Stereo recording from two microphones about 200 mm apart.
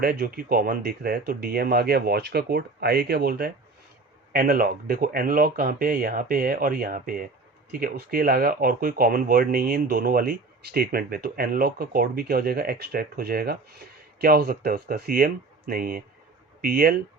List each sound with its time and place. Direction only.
0.0 s speech: 50° right (ahead or behind)